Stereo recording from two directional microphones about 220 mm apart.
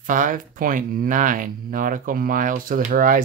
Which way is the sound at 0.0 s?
35° right (ahead or behind).